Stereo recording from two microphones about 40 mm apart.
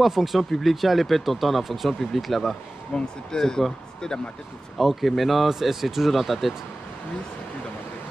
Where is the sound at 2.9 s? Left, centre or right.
Left.